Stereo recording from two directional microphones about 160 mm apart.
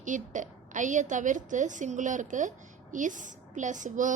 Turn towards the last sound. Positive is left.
turn(degrees=-55)  # may be behind; listen again after turning